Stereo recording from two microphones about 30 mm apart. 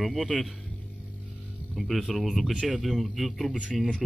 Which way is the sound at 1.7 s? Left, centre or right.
Centre.